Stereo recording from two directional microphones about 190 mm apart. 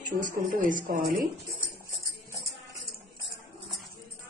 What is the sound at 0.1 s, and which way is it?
Speech, 45° right (ahead or behind).